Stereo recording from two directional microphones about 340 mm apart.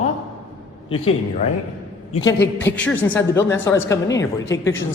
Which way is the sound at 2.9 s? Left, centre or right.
Centre.